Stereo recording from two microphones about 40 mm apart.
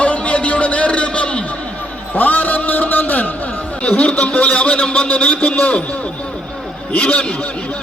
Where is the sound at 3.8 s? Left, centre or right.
Left.